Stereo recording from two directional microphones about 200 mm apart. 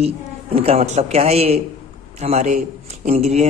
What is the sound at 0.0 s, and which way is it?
A man's voice, 30° right (ahead or behind).